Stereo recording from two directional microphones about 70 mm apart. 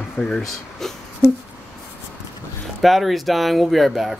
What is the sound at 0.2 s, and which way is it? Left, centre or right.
Speech, centre.